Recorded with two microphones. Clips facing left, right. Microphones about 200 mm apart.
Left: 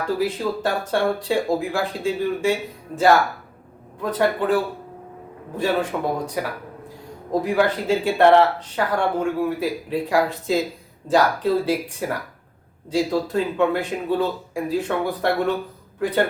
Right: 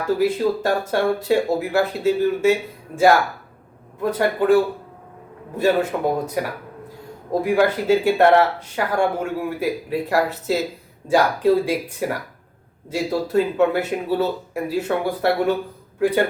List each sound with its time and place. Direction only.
0.2 s speech: 10° right (ahead or behind)
7.4 s speech: 10° right (ahead or behind)